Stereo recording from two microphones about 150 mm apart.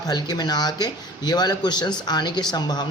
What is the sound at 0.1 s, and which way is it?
Speech, 25° left (ahead or behind).